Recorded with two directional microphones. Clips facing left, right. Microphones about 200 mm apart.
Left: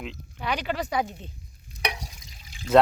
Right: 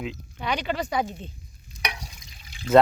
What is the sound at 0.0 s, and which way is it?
Speech, centre (ahead or behind).